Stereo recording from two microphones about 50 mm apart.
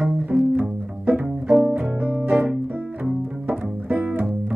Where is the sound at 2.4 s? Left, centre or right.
Centre.